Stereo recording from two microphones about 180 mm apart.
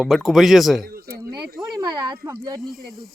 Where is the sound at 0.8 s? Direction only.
55° right (ahead or behind).